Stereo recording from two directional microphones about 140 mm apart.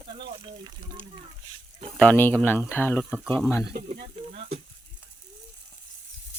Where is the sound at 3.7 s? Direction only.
65° right (ahead or behind).